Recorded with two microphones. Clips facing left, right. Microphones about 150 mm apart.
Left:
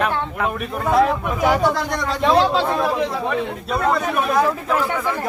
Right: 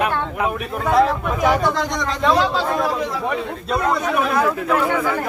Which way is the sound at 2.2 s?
25° left (ahead or behind).